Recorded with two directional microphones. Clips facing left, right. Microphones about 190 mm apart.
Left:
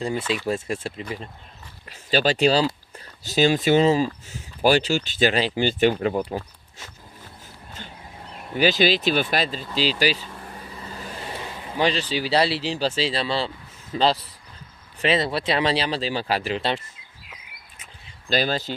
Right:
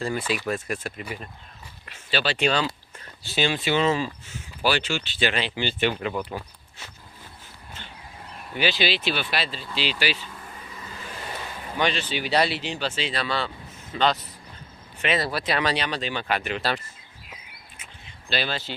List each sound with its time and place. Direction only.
0.4 s speech: 25° left (ahead or behind)
1.9 s speech: 40° left (ahead or behind)
8.5 s speech: 45° left (ahead or behind)
9.7 s vehicle: 40° left (ahead or behind)
11.8 s speech: 35° left (ahead or behind)
18.3 s speech: 40° left (ahead or behind)